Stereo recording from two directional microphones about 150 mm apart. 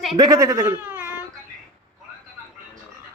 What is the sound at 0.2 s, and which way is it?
Speech, 20° right (ahead or behind).